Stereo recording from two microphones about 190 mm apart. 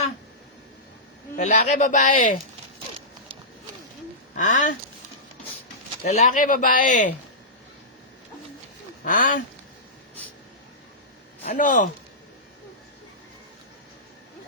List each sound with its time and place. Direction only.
1.4 s speech: 40° left (ahead or behind)
4.4 s speech: 40° left (ahead or behind)
6.1 s a man's voice: 40° left (ahead or behind)
9.0 s a man's voice: 45° left (ahead or behind)
11.4 s a man's voice: 40° left (ahead or behind)